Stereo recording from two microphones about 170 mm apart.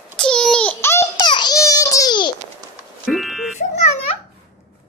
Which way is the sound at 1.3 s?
25° left (ahead or behind).